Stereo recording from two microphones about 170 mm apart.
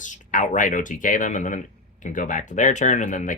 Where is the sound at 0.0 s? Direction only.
50° left (ahead or behind).